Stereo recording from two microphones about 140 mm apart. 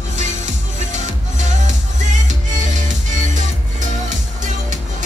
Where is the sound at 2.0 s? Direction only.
60° right (ahead or behind).